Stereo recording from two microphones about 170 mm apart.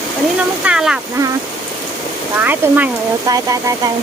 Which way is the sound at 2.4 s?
10° right (ahead or behind).